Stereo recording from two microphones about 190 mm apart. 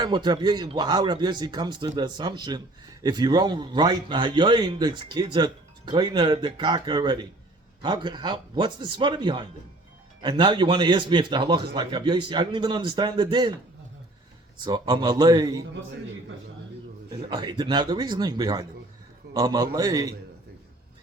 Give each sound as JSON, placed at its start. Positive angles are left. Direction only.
{"t": 0.0, "sound": "a man's voice", "side_deg": -25}
{"t": 14.6, "sound": "a man's voice", "side_deg": -20}
{"t": 17.1, "sound": "a man's voice", "side_deg": -25}